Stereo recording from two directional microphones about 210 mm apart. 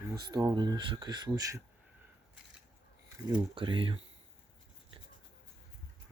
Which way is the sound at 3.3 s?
25° right (ahead or behind).